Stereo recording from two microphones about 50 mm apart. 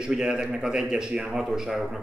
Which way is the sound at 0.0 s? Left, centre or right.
Centre.